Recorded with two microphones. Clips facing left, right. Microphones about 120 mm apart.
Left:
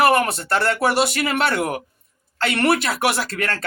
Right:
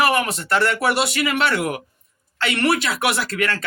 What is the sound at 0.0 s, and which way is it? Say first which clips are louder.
Speech: left 3 dB; 40° left (ahead or behind).